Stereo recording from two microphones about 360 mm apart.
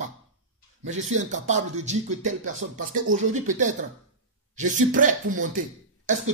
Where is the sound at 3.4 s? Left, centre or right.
Right.